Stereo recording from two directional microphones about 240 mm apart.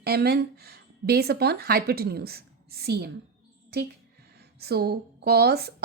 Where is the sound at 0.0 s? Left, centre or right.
Right.